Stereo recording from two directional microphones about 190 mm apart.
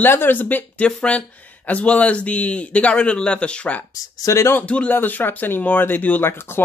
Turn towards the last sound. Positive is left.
turn(degrees=10)  # may be behind; listen again after turning